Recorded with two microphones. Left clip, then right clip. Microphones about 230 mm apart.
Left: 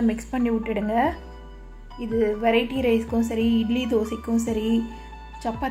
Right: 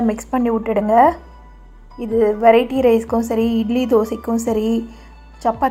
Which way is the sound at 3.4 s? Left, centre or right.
Right.